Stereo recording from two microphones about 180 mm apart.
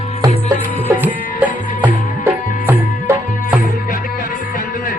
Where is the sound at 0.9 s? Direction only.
10° right (ahead or behind).